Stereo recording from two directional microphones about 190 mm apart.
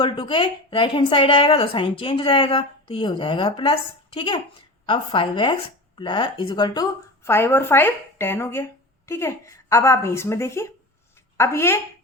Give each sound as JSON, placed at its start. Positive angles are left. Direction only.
{"t": 0.0, "sound": "speech", "side_deg": 25}
{"t": 7.3, "sound": "speech", "side_deg": 10}